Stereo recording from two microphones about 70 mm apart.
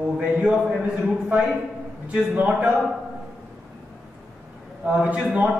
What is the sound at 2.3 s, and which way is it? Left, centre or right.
Speech, centre.